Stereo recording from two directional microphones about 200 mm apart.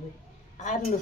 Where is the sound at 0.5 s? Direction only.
40° left (ahead or behind).